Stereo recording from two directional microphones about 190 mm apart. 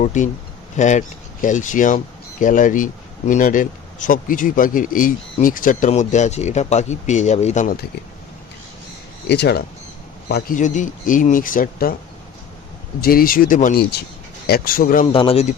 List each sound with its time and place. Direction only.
0.0 s speech: 40° left (ahead or behind)
9.3 s speech: 60° left (ahead or behind)
10.6 s speech: 40° left (ahead or behind)
13.0 s speech: 50° left (ahead or behind)
15.0 s speech: 30° left (ahead or behind)